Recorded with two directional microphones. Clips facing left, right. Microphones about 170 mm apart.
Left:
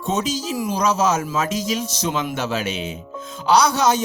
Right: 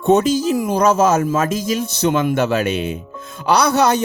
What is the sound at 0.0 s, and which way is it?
Speech, 60° right (ahead or behind).